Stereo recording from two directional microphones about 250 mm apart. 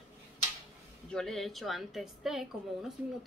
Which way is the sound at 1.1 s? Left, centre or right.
Centre.